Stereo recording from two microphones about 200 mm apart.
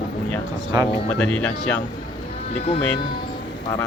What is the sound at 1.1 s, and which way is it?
Speech, 5° left (ahead or behind).